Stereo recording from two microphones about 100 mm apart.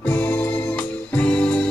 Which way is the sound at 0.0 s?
15° left (ahead or behind).